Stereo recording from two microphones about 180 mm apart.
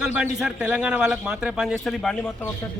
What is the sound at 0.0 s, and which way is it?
A man's voice, 5° right (ahead or behind).